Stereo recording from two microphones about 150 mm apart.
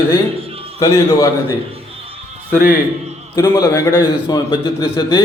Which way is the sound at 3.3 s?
20° left (ahead or behind).